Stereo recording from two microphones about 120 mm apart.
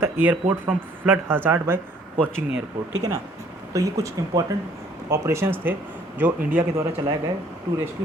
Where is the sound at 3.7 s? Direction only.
30° right (ahead or behind).